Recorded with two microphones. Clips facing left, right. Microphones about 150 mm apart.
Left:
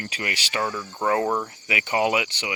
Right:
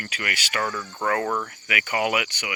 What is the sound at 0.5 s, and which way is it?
Speech, 15° left (ahead or behind).